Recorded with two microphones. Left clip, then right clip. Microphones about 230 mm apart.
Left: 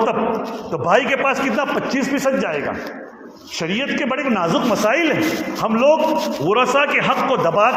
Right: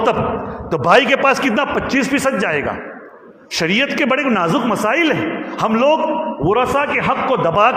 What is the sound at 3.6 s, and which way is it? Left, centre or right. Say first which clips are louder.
A man's voice: right 5 dB; right.